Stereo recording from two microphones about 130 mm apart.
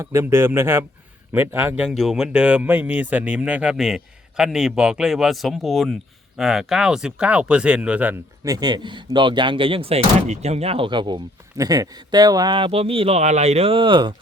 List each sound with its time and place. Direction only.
0.0 s a man's voice: 20° right (ahead or behind)
8.4 s speech: 30° right (ahead or behind)